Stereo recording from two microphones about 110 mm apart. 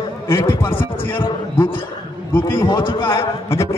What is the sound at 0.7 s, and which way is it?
Speech, 50° left (ahead or behind).